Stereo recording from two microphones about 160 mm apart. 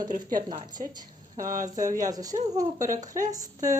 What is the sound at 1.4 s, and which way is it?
Speech, 55° right (ahead or behind).